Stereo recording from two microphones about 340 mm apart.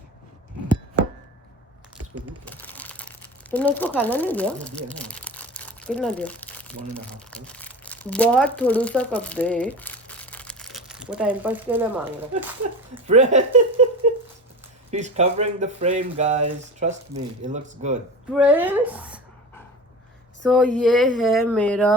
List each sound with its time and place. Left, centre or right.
2.4 s a sound: centre
3.5 s speech: centre
13.1 s speech: right
14.8 s speech: centre
18.3 s speech: centre
20.4 s speech: centre